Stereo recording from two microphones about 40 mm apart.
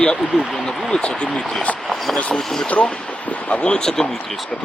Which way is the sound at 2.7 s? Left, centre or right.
Left.